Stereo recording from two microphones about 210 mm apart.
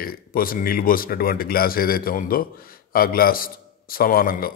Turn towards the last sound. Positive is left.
turn(degrees=45)  # may be behind; listen again after turning